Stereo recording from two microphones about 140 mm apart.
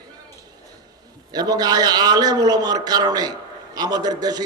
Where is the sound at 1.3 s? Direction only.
25° right (ahead or behind).